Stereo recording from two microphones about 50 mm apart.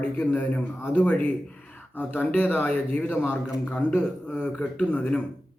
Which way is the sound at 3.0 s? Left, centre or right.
Left.